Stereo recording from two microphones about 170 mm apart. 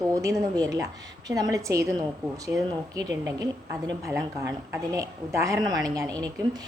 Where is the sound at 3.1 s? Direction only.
20° right (ahead or behind).